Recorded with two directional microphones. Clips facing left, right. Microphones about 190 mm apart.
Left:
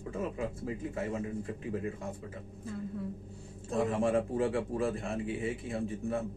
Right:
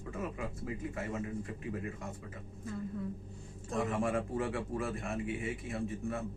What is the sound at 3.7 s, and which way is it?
A man's voice, 30° left (ahead or behind).